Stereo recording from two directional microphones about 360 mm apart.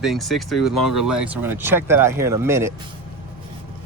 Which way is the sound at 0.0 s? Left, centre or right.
Centre.